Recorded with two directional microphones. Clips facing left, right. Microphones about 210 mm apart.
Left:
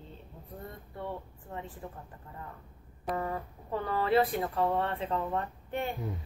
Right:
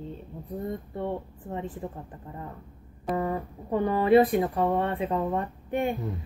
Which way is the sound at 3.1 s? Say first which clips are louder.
Right 7 dB; 15° right (ahead or behind).